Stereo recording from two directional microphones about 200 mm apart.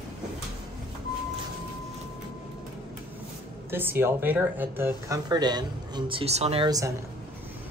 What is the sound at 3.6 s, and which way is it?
Speech, 10° right (ahead or behind).